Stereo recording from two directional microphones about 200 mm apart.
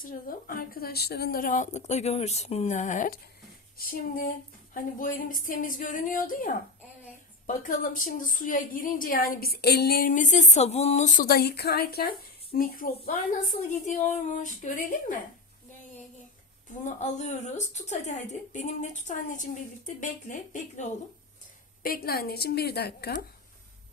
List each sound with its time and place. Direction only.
0.0 s a woman's voice: 45° left (ahead or behind)
16.6 s a woman's voice: 35° left (ahead or behind)
21.8 s a woman's voice: 50° left (ahead or behind)